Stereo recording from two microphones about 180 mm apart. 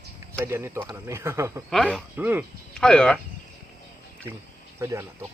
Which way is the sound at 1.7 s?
5° left (ahead or behind).